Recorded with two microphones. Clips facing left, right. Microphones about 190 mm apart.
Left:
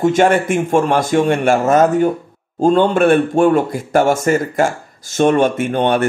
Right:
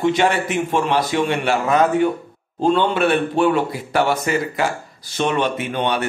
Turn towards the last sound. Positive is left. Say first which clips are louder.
# left 6 dB
turn(degrees=50)  # may be behind; listen again after turning